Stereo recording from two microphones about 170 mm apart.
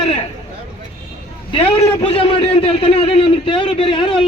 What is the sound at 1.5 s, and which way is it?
A man's voice, 30° left (ahead or behind).